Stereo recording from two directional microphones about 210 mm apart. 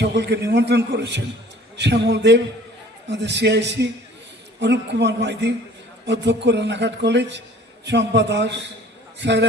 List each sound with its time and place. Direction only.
0.0 s speech: 55° right (ahead or behind)